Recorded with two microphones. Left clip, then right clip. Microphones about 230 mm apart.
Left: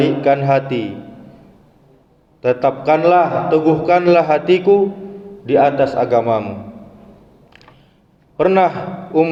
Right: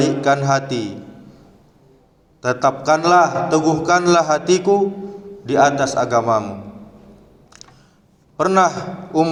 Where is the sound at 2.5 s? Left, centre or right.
Right.